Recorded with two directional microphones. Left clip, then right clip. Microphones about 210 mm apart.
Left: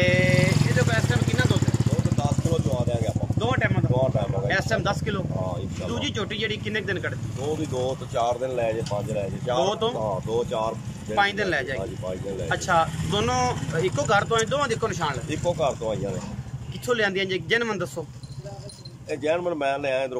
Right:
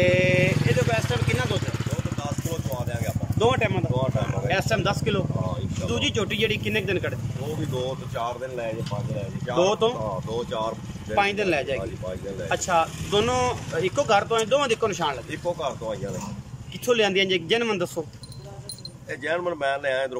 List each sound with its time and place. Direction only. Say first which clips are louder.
0.0 s vehicle: right 1 dB; 5° right (ahead or behind)
2.1 s vehicle: left 5 dB; 15° left (ahead or behind)
3.3 s vehicle: right 4 dB; 10° right (ahead or behind)
4.5 s a sound: right 1 dB; 5° right (ahead or behind)
5.9 s speech: right 4 dB; 5° right (ahead or behind)
7.7 s a man's voice: left 3 dB; 15° left (ahead or behind)
9.6 s speech: right 4 dB; 10° right (ahead or behind)
10.3 s a man's voice: left 3 dB; 10° left (ahead or behind)
11.1 s speech: even; 5° right (ahead or behind)
15.4 s a man's voice: left 4 dB; 15° left (ahead or behind)
16.8 s speech: right 3 dB; 10° right (ahead or behind)
19.0 s a man's voice: left 2 dB; 10° left (ahead or behind)